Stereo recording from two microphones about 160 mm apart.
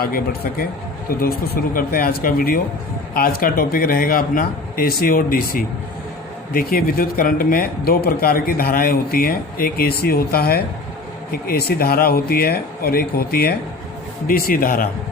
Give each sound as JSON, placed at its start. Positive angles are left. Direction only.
{"t": 1.2, "sound": "a man's voice", "side_deg": 65}